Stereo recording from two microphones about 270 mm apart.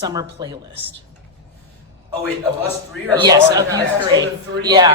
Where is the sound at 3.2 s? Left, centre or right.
Centre.